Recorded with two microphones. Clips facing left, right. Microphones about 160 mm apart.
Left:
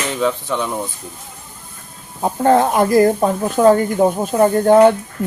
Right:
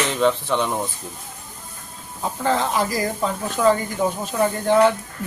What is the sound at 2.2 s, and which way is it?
Speech, 50° left (ahead or behind).